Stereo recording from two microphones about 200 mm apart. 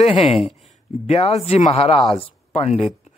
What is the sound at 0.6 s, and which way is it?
Speech, 35° left (ahead or behind).